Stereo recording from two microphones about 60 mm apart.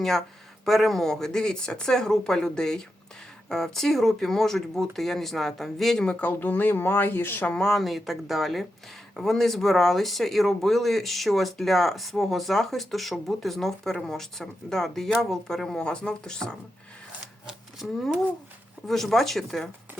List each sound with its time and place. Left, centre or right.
0.6 s speech: centre
6.0 s speech: centre
7.4 s speech: centre
17.7 s speech: centre